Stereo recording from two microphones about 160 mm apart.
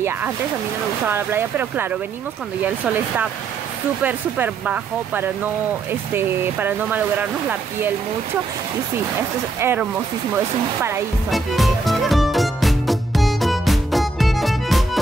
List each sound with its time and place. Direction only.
1.0 s speech: 10° right (ahead or behind)
9.6 s speech: 15° right (ahead or behind)
11.2 s music: centre (ahead or behind)